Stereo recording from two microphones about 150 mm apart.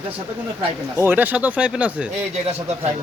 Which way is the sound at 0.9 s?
15° right (ahead or behind).